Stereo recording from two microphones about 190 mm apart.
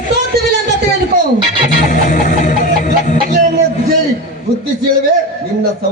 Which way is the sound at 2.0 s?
40° left (ahead or behind).